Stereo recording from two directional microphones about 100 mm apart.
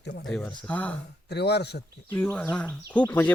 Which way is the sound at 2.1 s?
15° left (ahead or behind).